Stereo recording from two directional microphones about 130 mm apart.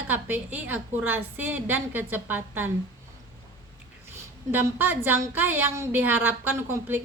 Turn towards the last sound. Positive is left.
turn(degrees=-15)  # may be behind; listen again after turning